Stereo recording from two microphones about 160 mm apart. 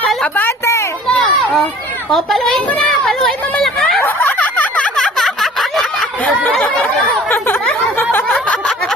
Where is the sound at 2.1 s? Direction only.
Centre (ahead or behind).